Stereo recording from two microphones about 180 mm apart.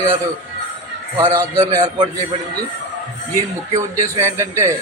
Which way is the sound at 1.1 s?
20° right (ahead or behind).